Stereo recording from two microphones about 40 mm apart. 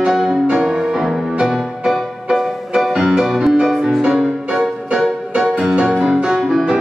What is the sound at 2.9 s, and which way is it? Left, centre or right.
Music, centre.